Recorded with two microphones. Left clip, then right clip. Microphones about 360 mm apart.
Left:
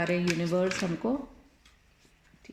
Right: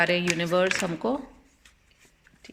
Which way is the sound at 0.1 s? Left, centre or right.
Right.